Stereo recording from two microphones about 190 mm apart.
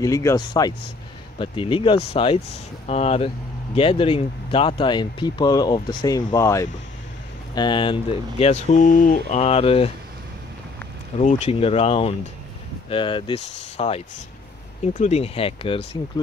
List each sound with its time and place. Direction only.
0.0 s speech: 20° left (ahead or behind)
11.1 s speech: 35° left (ahead or behind)